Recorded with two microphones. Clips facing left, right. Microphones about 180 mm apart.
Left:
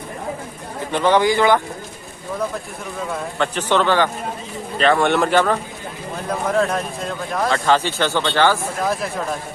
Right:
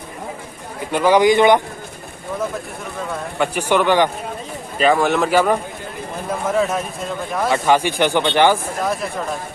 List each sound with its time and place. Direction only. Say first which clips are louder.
0.9 s a man's voice: right 3 dB; 10° right (ahead or behind)
3.3 s a man's voice: right 2 dB; 10° right (ahead or behind)
8.8 s speech: left 1 dB; centre (ahead or behind)